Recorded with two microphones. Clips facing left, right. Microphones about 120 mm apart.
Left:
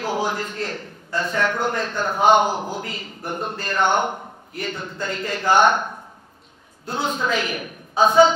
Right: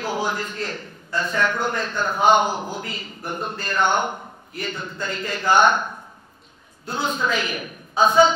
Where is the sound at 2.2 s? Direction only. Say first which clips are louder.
Left 1 dB; 55° left (ahead or behind).